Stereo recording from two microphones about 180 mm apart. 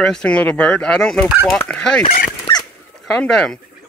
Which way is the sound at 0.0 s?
5° left (ahead or behind).